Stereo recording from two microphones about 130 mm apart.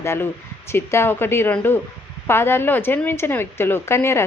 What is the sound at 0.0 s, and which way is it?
Speech, 20° left (ahead or behind).